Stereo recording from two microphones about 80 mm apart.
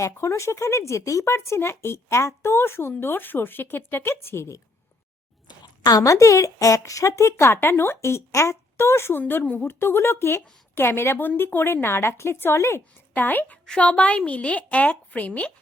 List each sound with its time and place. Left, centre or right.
0.0 s speech: left
5.5 s speech: left; by 9.6 s centre
9.6 s speech: left
13.1 s a woman's voice: left